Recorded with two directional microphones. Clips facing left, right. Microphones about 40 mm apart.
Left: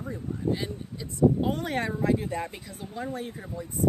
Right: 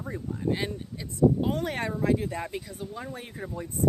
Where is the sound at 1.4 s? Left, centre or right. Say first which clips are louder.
Left 1 dB; centre.